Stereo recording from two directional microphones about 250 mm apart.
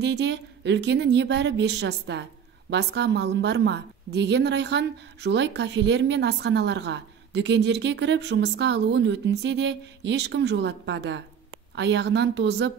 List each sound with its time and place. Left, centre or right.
0.0 s a woman's voice: right